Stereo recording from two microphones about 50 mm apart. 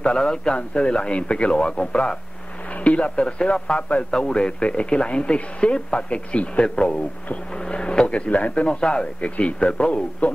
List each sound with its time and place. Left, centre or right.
0.0 s speech: centre